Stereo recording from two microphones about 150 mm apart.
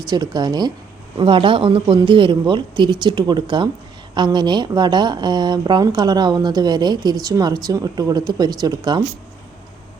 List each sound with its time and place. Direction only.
0.1 s speech: 25° right (ahead or behind)